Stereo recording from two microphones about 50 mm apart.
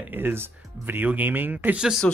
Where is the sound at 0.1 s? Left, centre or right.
Right.